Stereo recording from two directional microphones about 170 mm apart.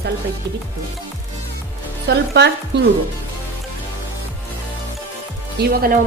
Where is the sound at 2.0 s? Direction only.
85° right.